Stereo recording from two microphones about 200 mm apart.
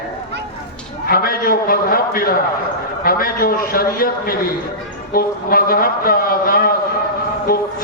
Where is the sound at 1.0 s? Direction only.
50° left (ahead or behind).